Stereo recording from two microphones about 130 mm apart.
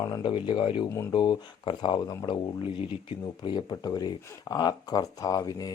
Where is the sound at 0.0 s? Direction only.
35° left (ahead or behind).